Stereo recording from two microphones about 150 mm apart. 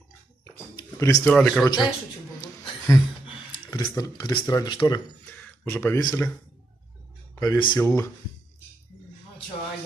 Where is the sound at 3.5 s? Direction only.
30° left (ahead or behind).